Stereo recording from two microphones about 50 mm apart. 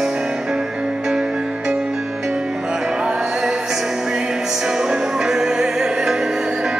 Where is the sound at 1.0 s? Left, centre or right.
Centre.